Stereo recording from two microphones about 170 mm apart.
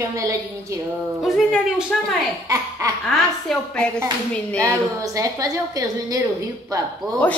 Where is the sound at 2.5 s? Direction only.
20° right (ahead or behind).